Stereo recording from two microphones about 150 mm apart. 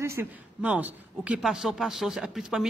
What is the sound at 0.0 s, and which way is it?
Speech, 15° right (ahead or behind).